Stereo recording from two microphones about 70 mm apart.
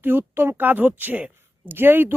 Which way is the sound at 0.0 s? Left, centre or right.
Right.